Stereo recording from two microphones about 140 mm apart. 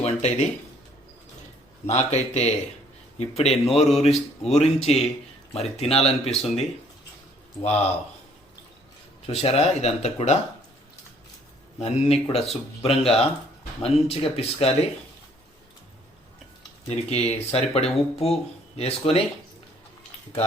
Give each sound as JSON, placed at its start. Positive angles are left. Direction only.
{"t": 0.0, "sound": "speech", "side_deg": 55}
{"t": 1.9, "sound": "speech", "side_deg": 55}
{"t": 9.2, "sound": "speech", "side_deg": 45}
{"t": 11.8, "sound": "speech", "side_deg": 45}
{"t": 16.9, "sound": "speech", "side_deg": 50}